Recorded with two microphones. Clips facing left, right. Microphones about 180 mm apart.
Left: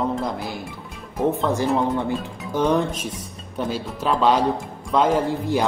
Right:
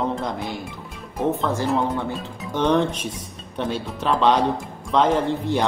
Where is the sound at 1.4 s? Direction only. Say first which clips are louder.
Left 1 dB; 15° left (ahead or behind).